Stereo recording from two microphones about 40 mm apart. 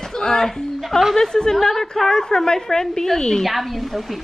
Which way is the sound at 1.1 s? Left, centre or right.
Centre.